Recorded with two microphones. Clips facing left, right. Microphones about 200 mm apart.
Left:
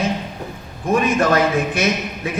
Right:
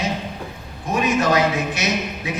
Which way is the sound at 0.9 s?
55° left (ahead or behind).